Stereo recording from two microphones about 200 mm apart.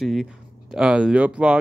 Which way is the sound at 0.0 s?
Centre (ahead or behind).